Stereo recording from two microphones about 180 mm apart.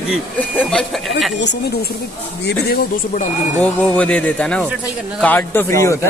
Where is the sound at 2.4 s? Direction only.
55° left (ahead or behind).